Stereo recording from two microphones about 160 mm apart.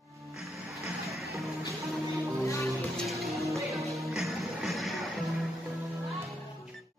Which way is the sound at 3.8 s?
Centre (ahead or behind).